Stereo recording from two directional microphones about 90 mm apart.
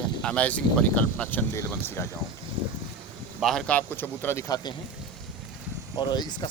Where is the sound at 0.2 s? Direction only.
15° left (ahead or behind).